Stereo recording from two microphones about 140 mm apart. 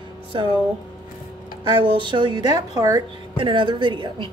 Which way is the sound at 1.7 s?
35° right (ahead or behind).